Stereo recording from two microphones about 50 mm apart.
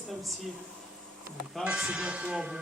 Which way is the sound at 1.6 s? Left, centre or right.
Centre.